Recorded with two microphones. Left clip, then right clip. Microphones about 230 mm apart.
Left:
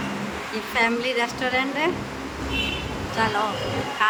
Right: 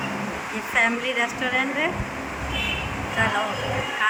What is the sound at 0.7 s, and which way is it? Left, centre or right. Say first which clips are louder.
Speech: right 1 dB; centre.